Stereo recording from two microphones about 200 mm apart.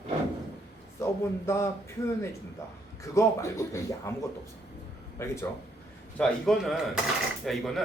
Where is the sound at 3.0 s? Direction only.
15° left (ahead or behind).